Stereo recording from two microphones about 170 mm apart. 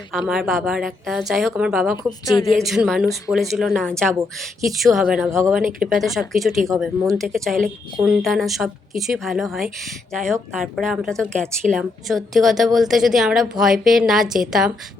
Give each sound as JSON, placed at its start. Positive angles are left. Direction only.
{"t": 0.1, "sound": "a woman's voice", "side_deg": 0}
{"t": 2.3, "sound": "a woman's voice", "side_deg": 25}
{"t": 2.6, "sound": "a woman's voice", "side_deg": 0}